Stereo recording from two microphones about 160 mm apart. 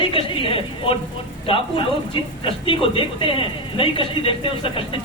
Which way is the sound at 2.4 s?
35° left (ahead or behind).